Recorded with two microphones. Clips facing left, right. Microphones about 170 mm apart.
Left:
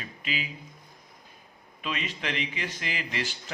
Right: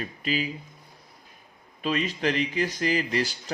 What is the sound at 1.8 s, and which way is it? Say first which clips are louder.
A man's voice: right 7 dB; 40° right (ahead or behind).